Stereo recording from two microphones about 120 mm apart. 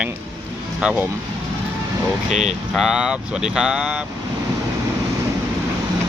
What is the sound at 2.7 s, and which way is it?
Speech, 5° right (ahead or behind).